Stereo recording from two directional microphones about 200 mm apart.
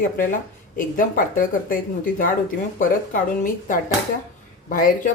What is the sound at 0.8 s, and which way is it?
Speech, 45° left (ahead or behind).